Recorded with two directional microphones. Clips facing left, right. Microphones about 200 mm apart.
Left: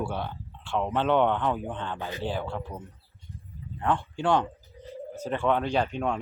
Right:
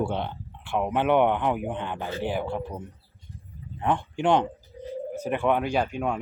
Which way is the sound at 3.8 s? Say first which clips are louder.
Right 2 dB; 20° right (ahead or behind).